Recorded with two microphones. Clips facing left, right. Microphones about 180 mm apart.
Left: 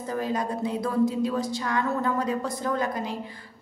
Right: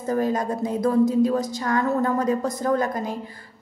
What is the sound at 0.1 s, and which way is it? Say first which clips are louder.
A woman's voice: right 5 dB; 45° right (ahead or behind).